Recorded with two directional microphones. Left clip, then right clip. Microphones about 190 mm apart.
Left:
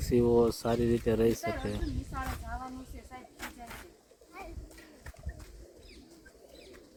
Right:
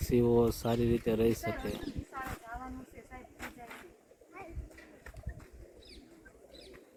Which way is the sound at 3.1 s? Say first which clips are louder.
Left 2 dB; 65° left (ahead or behind).